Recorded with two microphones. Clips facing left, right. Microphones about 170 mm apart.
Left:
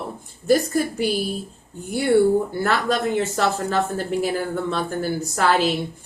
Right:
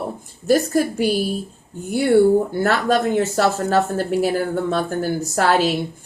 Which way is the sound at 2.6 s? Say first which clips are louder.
Right 3 dB; 45° right (ahead or behind).